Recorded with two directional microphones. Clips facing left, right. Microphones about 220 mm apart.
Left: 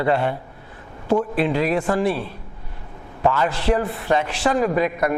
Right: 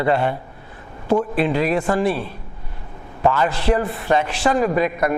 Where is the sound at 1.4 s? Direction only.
15° right (ahead or behind).